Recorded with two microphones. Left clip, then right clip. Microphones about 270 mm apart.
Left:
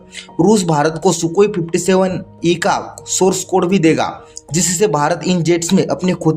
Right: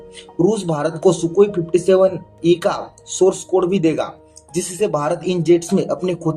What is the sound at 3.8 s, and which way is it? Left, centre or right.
Speech, left.